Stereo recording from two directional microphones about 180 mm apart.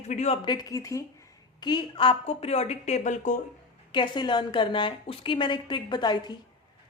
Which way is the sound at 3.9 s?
25° left (ahead or behind).